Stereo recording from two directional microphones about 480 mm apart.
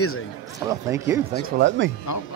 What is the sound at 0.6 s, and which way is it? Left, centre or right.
Speech, centre.